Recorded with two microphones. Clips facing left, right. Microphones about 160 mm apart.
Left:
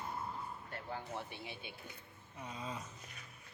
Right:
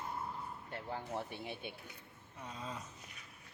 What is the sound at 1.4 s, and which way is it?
Speech, 50° right (ahead or behind).